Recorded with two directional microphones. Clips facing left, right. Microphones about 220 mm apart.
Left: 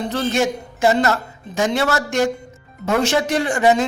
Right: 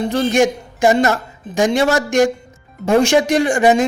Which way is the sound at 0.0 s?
15° right (ahead or behind).